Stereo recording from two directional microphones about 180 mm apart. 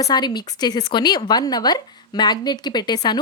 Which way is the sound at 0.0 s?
25° left (ahead or behind).